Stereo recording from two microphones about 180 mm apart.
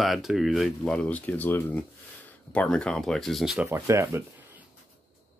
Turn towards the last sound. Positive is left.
turn(degrees=-15)  # may be behind; listen again after turning